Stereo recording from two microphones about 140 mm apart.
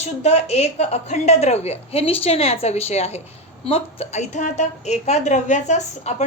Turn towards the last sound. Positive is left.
turn(degrees=55)  # may be behind; listen again after turning